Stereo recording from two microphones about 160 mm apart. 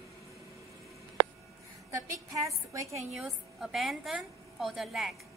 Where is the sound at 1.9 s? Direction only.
20° right (ahead or behind).